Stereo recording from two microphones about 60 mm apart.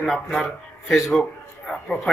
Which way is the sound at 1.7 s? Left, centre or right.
Centre.